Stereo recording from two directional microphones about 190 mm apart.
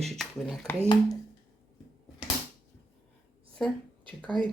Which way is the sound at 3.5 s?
5° left (ahead or behind).